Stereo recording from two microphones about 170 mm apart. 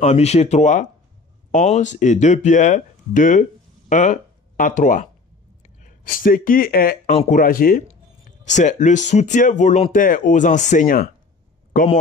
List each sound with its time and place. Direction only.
0.0 s speech: 40° left (ahead or behind); by 7.8 s 55° left (ahead or behind)
8.5 s speech: 45° left (ahead or behind)